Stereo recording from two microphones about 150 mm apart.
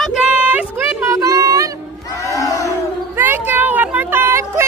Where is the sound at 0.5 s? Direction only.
15° right (ahead or behind).